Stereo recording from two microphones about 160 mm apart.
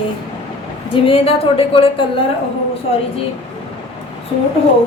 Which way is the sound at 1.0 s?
35° left (ahead or behind).